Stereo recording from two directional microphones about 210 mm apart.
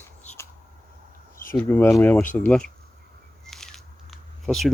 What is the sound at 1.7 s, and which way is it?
Speech, 10° left (ahead or behind).